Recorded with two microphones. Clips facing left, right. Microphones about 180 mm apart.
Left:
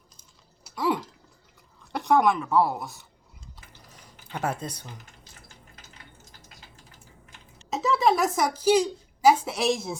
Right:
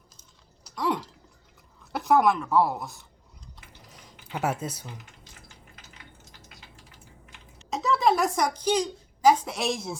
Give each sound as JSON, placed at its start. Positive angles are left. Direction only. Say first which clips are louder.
{"t": 0.6, "sound": "typing", "louder": "left 2 dB", "side_deg": 5}
{"t": 1.9, "sound": "speech", "louder": "even", "side_deg": 0}
{"t": 4.3, "sound": "speech", "louder": "right 1 dB", "side_deg": -5}
{"t": 4.9, "sound": "a sound", "louder": "right 1 dB", "side_deg": 40}
{"t": 7.7, "sound": "a woman's voice", "louder": "left 1 dB", "side_deg": 0}